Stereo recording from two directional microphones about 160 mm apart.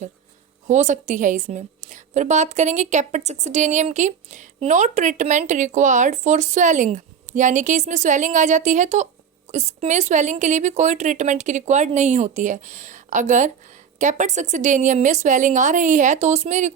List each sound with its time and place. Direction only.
0.7 s a woman's voice: 50° right (ahead or behind)